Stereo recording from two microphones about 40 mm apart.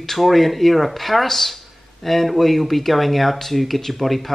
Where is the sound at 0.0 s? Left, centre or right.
Centre.